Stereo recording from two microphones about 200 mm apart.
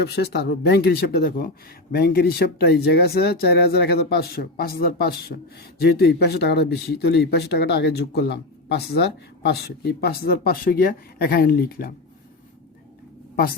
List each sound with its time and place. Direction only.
0.0 s speech: 55° left (ahead or behind)
13.3 s a woman's voice: 50° left (ahead or behind)